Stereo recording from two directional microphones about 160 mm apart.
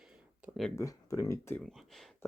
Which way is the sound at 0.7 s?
20° left (ahead or behind).